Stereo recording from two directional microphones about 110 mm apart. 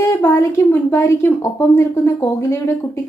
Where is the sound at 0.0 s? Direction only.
25° left (ahead or behind).